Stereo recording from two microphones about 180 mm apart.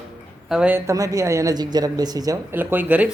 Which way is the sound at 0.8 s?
15° right (ahead or behind).